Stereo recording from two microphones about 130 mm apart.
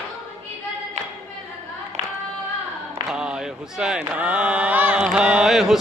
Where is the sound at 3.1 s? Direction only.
5° right (ahead or behind).